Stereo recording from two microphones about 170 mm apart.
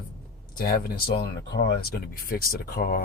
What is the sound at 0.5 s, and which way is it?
Speech, 60° left (ahead or behind).